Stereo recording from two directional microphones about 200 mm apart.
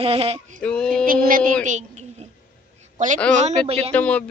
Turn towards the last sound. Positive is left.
turn(degrees=5)  # may be behind; listen again after turning